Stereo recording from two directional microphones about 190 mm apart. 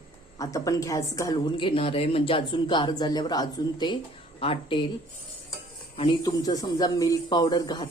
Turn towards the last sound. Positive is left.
turn(degrees=20)  # may be behind; listen again after turning